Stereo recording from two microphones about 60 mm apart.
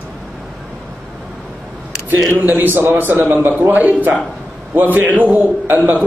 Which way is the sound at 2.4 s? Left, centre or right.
Right.